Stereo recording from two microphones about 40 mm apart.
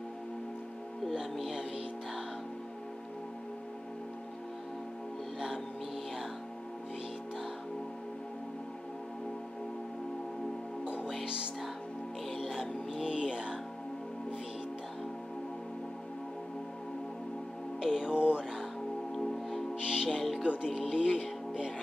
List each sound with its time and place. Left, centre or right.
12.4 s music: centre
17.7 s music: centre
18.1 s music: right
19.8 s music: centre
20.1 s music: centre